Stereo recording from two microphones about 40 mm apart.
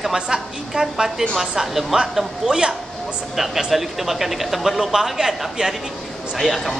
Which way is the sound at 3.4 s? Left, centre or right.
Centre.